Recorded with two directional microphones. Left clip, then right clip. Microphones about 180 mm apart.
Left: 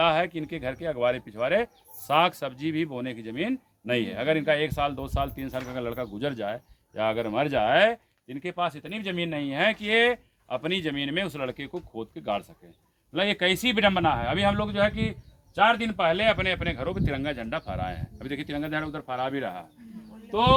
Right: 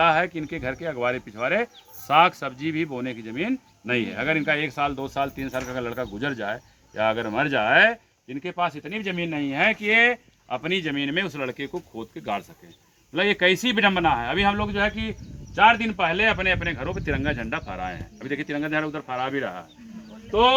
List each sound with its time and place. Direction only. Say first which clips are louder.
0.0 s speech: right 3 dB; 40° left (ahead or behind)